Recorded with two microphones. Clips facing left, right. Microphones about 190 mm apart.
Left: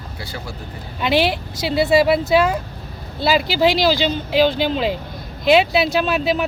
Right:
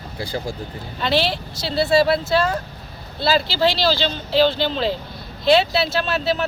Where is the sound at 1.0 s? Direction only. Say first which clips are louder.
Left 3 dB; 15° left (ahead or behind).